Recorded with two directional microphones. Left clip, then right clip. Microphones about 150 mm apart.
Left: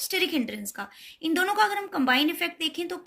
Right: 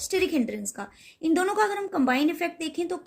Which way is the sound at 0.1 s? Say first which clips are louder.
Right 2 dB; 55° right (ahead or behind).